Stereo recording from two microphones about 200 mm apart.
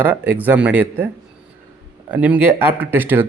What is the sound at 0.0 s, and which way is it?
Speech, 10° right (ahead or behind).